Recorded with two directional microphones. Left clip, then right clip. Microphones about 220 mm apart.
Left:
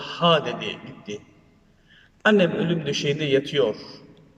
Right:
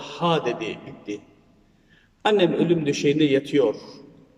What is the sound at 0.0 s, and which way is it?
Speech, 15° right (ahead or behind).